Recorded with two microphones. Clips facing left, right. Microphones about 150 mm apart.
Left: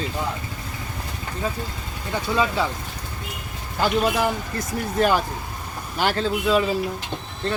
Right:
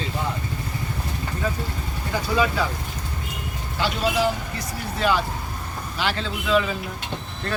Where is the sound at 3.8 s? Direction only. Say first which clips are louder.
Left 2 dB; 50° left (ahead or behind).